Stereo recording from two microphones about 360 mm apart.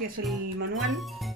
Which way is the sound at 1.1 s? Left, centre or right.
Centre.